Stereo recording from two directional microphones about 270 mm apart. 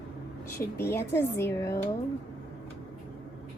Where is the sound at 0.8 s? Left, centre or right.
Centre.